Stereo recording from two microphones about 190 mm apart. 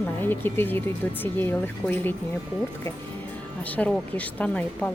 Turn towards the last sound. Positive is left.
turn(degrees=5)  # may be behind; listen again after turning